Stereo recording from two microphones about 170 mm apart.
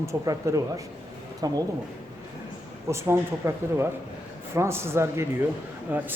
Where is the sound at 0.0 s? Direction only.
15° right (ahead or behind).